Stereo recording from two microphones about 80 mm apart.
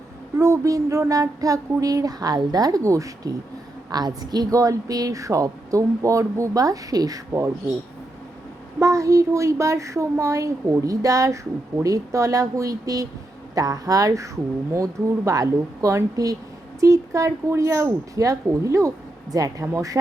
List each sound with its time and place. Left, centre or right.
0.3 s a woman's voice: right
3.9 s a woman's voice: right
8.8 s a woman's voice: right